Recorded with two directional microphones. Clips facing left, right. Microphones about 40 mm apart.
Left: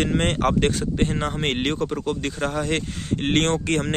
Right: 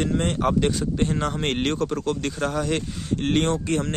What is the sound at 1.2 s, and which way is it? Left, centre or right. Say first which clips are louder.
Speech: even; left.